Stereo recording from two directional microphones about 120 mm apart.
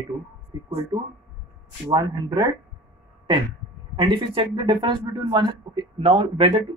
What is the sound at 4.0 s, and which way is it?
Speech, 40° right (ahead or behind).